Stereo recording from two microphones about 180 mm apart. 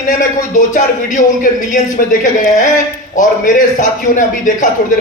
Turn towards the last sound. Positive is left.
turn(degrees=45)  # may be behind; listen again after turning